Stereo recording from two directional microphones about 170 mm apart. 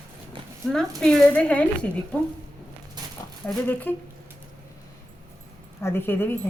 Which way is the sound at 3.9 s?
10° left (ahead or behind).